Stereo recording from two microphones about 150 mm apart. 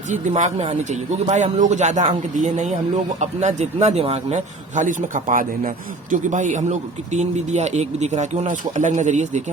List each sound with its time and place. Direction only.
0.1 s a man's voice: 55° right (ahead or behind)